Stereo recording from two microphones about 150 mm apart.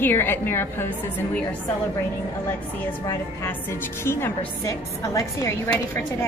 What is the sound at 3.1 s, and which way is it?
A woman's voice, 15° left (ahead or behind).